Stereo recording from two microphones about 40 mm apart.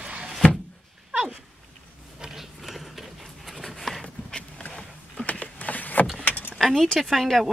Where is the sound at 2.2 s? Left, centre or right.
Centre.